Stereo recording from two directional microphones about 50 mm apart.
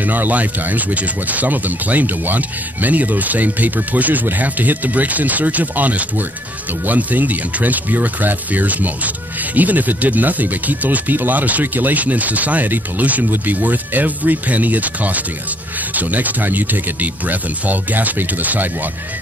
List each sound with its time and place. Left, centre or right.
0.0 s speech: right